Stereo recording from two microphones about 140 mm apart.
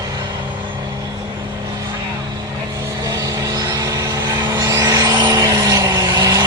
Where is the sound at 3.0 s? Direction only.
25° right (ahead or behind).